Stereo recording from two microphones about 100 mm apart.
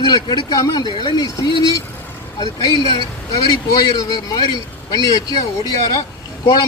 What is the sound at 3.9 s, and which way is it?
A man's voice, 45° left (ahead or behind).